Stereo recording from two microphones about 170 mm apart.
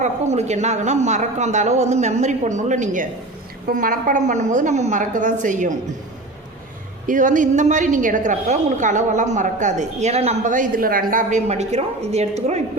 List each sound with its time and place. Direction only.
0.0 s a woman's voice: 40° right (ahead or behind)
7.1 s a woman's voice: 50° right (ahead or behind)